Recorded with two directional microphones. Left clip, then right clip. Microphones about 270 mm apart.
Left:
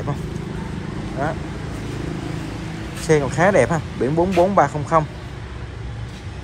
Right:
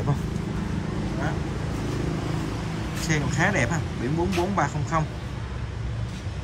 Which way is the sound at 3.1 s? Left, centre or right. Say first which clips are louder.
Left 9 dB; centre.